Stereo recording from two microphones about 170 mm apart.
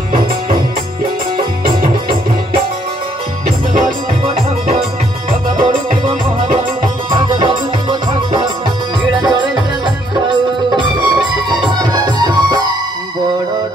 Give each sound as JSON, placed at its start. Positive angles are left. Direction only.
{"t": 5.6, "sound": "music", "side_deg": -50}
{"t": 7.1, "sound": "music", "side_deg": -25}
{"t": 10.8, "sound": "music", "side_deg": -25}